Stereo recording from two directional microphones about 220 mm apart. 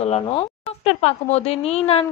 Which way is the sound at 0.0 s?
25° left (ahead or behind).